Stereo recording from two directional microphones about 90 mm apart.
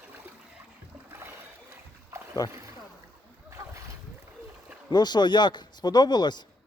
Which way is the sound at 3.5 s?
35° right (ahead or behind).